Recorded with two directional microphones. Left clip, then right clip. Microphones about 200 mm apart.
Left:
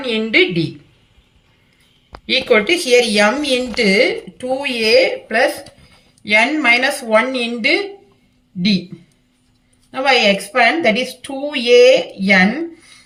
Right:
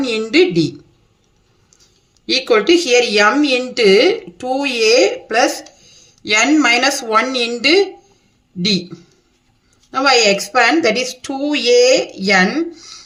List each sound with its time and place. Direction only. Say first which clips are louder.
0.0 s a woman's voice: right 1 dB; 70° right (ahead or behind)
2.2 s speech: even; 65° right (ahead or behind)
9.9 s speech: right 1 dB; 65° right (ahead or behind)